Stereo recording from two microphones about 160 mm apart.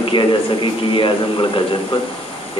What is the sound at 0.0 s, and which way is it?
A man's voice, 30° left (ahead or behind).